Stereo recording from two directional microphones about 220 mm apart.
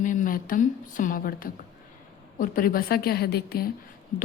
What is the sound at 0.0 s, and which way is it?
A woman's voice, 35° left (ahead or behind).